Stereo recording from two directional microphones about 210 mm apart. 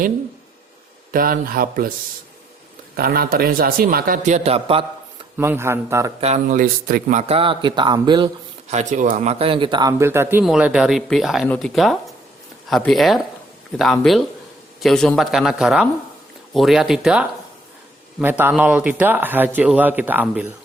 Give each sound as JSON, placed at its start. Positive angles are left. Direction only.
{"t": 1.1, "sound": "a man's voice", "side_deg": -45}
{"t": 2.9, "sound": "a man's voice", "side_deg": -45}
{"t": 5.4, "sound": "speech", "side_deg": -10}
{"t": 6.1, "sound": "speech", "side_deg": -30}
{"t": 8.7, "sound": "speech", "side_deg": -35}